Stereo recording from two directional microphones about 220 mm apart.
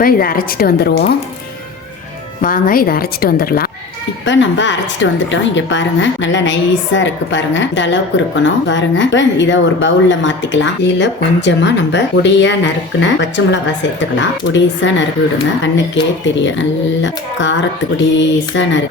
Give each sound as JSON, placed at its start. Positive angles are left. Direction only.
{"t": 0.0, "sound": "speech", "side_deg": 40}
{"t": 2.4, "sound": "speech", "side_deg": 40}
{"t": 4.3, "sound": "speech", "side_deg": 55}
{"t": 16.6, "sound": "speech", "side_deg": 55}